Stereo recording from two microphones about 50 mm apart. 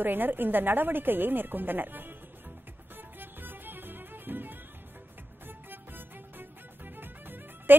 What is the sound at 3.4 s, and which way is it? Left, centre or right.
Music, right.